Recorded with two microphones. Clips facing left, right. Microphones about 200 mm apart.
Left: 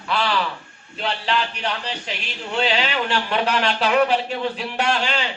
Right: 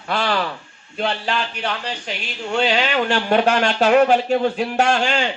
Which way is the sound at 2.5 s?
45° right (ahead or behind).